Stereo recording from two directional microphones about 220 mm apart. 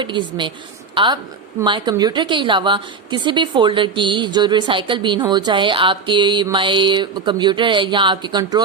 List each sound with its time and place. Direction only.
0.0 s a woman's voice: 20° right (ahead or behind)